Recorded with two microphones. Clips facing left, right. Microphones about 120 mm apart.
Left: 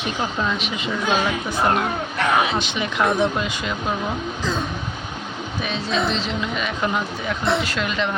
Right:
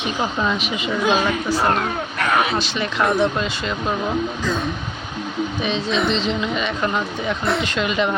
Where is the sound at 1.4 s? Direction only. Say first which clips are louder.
Right 1 dB; 10° left (ahead or behind).